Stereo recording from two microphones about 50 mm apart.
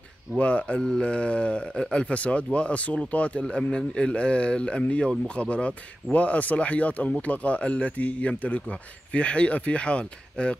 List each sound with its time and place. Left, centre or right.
0.4 s speech: left